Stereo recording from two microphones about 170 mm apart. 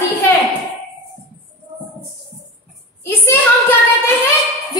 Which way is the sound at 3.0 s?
15° left (ahead or behind).